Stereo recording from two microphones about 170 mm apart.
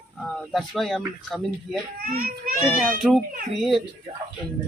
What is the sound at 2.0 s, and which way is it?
Speech, 55° right (ahead or behind).